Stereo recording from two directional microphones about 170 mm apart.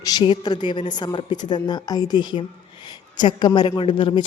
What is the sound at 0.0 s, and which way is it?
Speech, 25° left (ahead or behind).